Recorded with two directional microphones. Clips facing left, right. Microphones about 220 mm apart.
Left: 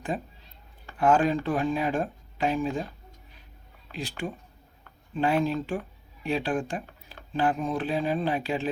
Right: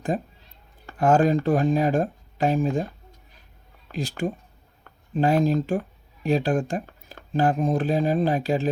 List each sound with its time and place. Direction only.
0.9 s speech: 40° right (ahead or behind)
3.9 s speech: 45° right (ahead or behind)